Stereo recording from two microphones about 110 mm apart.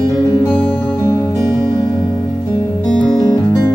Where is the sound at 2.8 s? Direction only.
5° left (ahead or behind).